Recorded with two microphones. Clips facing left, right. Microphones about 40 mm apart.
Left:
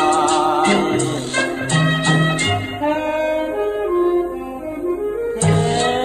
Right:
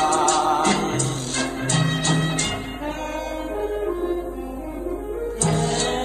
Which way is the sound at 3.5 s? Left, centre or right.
Left.